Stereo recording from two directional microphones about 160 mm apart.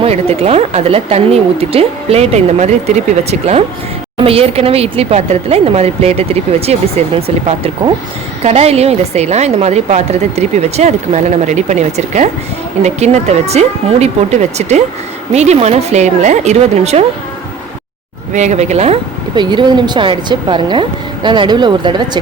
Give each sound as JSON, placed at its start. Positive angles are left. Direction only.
{"t": 0.0, "sound": "a woman's voice", "side_deg": -40}
{"t": 18.3, "sound": "a woman's voice", "side_deg": -45}
{"t": 19.4, "sound": "speech", "side_deg": -30}